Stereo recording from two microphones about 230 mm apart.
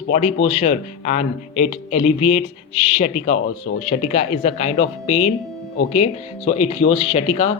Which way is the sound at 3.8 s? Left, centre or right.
Left.